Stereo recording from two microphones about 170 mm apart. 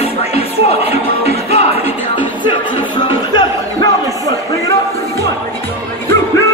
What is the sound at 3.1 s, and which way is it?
Music, 25° left (ahead or behind).